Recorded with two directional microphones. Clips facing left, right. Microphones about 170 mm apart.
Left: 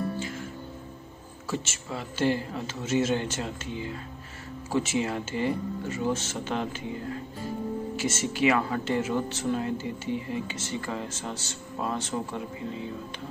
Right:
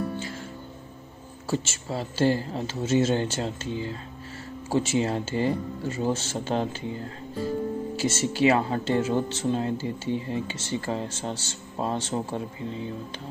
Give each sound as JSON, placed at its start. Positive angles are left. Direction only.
{"t": 1.5, "sound": "speech", "side_deg": -30}